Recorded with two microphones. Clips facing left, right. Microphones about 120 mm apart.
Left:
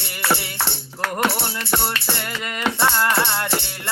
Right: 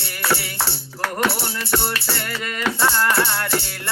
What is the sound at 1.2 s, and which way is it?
Music, 20° left (ahead or behind).